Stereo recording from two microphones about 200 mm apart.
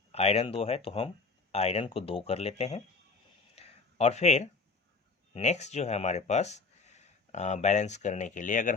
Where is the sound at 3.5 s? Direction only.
30° left (ahead or behind).